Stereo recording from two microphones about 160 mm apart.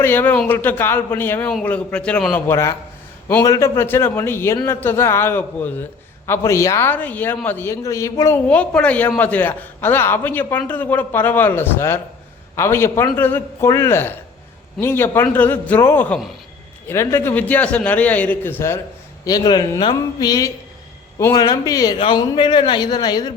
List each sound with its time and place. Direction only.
0.0 s a man's voice: 15° left (ahead or behind)
2.5 s a man's voice: 15° left (ahead or behind)
8.4 s a man's voice: 5° left (ahead or behind)
19.2 s a man's voice: 25° left (ahead or behind)